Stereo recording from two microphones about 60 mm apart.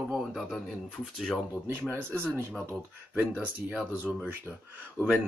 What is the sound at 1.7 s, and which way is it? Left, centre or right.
Speech, right.